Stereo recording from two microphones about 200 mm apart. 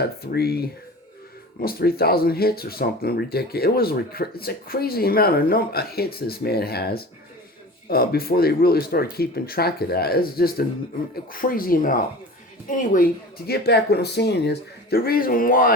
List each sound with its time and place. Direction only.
0.2 s a woman's voice: 50° left (ahead or behind)
13.5 s speech: 55° left (ahead or behind)